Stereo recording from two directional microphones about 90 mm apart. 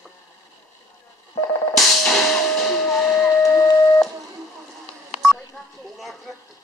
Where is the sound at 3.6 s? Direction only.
40° left (ahead or behind).